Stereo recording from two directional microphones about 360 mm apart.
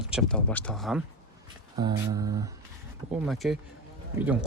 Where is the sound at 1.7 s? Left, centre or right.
Centre.